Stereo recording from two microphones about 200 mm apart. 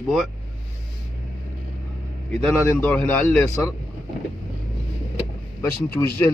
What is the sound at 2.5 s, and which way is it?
A man's voice, 10° left (ahead or behind).